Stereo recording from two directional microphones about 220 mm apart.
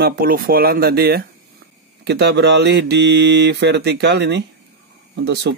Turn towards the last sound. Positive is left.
turn(degrees=-50)  # may be behind; listen again after turning